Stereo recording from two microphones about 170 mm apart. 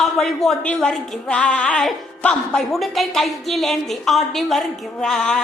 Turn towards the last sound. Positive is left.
turn(degrees=5)  # may be behind; listen again after turning